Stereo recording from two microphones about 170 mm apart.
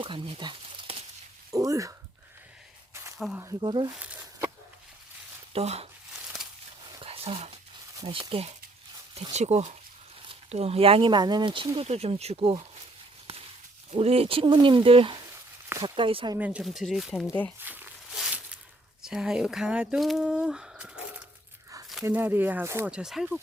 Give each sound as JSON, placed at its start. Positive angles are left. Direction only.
{"t": 0.0, "sound": "speech", "side_deg": -30}
{"t": 1.5, "sound": "speech", "side_deg": -20}
{"t": 2.9, "sound": "a sound", "side_deg": -15}
{"t": 3.6, "sound": "speech", "side_deg": -30}
{"t": 3.9, "sound": "a sound", "side_deg": -10}
{"t": 5.5, "sound": "speech", "side_deg": -35}
{"t": 7.0, "sound": "a sound", "side_deg": -35}
{"t": 7.9, "sound": "speech", "side_deg": -25}
{"t": 13.9, "sound": "speech", "side_deg": -35}
{"t": 16.4, "sound": "speech", "side_deg": -5}
{"t": 17.2, "sound": "speech", "side_deg": 10}
{"t": 17.6, "sound": "walk", "side_deg": -10}
{"t": 19.0, "sound": "speech", "side_deg": -5}